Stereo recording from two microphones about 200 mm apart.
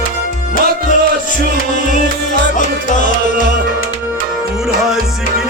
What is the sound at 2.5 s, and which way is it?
Music, 40° left (ahead or behind).